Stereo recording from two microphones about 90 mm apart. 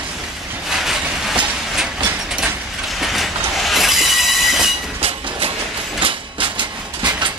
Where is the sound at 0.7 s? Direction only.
5° right (ahead or behind).